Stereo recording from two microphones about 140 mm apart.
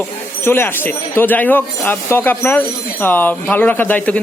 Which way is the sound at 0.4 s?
15° left (ahead or behind).